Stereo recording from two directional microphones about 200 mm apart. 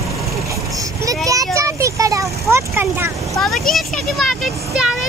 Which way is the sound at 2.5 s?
10° right (ahead or behind).